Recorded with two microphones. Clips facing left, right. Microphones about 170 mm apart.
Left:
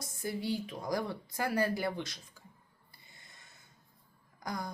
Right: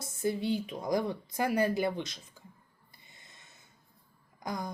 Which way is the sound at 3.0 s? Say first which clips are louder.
Right 1 dB; 20° right (ahead or behind).